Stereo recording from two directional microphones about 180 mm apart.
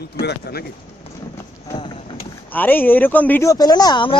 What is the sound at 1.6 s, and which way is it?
Clip-clop, 25° left (ahead or behind).